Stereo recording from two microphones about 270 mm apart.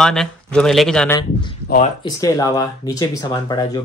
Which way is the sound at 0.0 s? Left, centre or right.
Centre.